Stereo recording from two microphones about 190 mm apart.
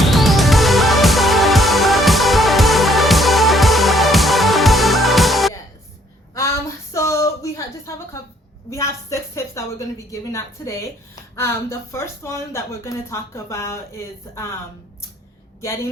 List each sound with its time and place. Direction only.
0.0 s music: centre (ahead or behind)
6.9 s a sound: 15° left (ahead or behind)
8.7 s a woman's voice: 15° left (ahead or behind)